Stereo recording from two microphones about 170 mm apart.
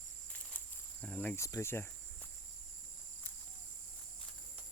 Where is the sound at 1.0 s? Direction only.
5° left (ahead or behind).